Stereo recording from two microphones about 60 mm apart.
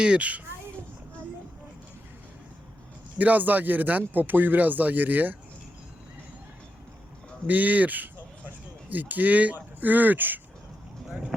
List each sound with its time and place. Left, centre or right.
0.0 s speech: centre
3.2 s speech: right
7.4 s speech: right